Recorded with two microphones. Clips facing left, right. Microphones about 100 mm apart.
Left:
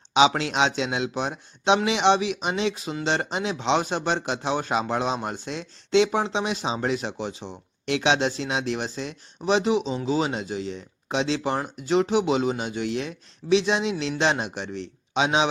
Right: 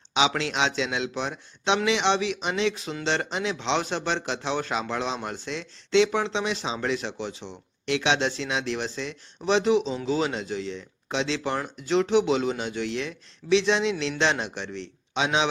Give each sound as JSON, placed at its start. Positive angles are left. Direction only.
{"t": 0.1, "sound": "speech", "side_deg": 20}